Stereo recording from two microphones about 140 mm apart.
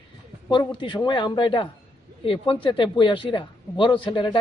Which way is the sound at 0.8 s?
35° left (ahead or behind).